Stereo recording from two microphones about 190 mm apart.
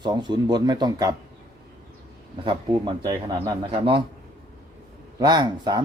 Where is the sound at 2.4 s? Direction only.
20° right (ahead or behind).